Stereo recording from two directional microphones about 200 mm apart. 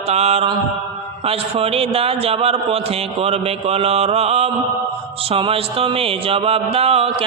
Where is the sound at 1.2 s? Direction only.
30° right (ahead or behind).